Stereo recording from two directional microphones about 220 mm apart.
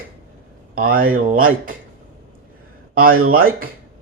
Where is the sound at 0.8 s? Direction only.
40° right (ahead or behind).